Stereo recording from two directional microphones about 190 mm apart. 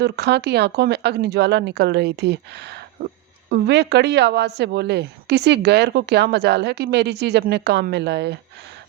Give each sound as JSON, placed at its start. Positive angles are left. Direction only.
{"t": 0.0, "sound": "a woman's voice", "side_deg": -60}